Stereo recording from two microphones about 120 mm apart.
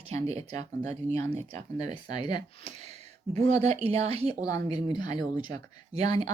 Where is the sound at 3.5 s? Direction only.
60° right (ahead or behind).